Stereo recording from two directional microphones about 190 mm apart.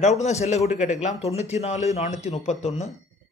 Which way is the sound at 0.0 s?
35° left (ahead or behind).